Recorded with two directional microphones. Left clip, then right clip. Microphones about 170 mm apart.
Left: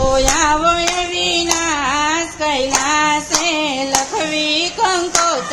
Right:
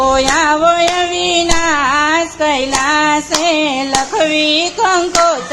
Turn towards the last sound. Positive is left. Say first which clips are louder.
# right 4 dB
turn(degrees=-20)  # may be behind; listen again after turning